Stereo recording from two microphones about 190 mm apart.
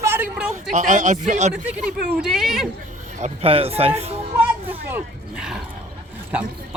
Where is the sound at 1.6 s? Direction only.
5° right (ahead or behind).